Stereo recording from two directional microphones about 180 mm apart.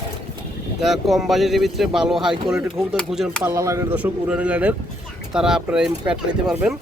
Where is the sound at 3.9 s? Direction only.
5° right (ahead or behind).